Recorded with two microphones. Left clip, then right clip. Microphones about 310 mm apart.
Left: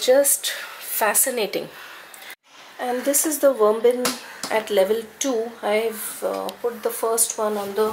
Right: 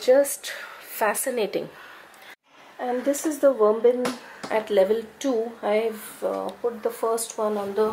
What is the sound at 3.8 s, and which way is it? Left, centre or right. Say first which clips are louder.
Speech: left 2 dB; centre.